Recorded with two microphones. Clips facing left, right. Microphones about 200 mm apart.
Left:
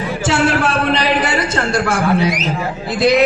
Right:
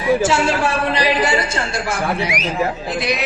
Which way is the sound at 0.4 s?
65° left (ahead or behind).